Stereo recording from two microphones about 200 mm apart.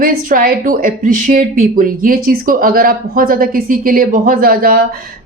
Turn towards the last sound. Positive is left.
turn(degrees=-45)  # may be behind; listen again after turning